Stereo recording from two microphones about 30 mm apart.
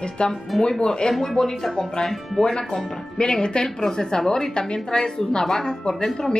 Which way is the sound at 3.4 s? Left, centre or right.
Left.